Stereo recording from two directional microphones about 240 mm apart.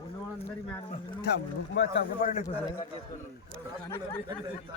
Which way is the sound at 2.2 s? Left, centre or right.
Left.